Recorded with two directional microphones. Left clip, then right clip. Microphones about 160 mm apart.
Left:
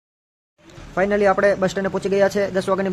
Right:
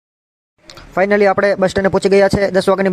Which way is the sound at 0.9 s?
50° right (ahead or behind).